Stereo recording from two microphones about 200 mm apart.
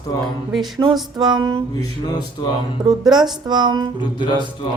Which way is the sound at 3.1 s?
20° right (ahead or behind).